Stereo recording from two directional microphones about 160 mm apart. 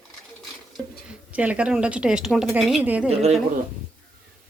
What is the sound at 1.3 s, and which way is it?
A woman's voice, 10° right (ahead or behind).